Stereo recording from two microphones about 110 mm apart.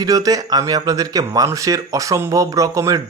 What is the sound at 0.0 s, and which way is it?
Speech, 35° right (ahead or behind).